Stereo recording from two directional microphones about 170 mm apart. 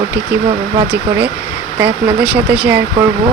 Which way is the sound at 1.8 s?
10° right (ahead or behind).